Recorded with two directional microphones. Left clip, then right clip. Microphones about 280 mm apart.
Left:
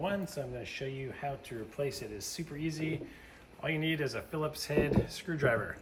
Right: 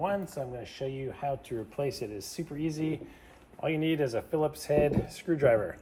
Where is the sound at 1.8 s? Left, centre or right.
Centre.